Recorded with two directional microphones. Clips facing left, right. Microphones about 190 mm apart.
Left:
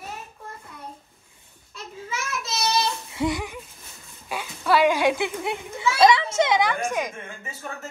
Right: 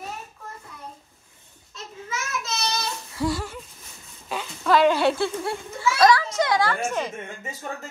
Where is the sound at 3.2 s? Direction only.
20° left (ahead or behind).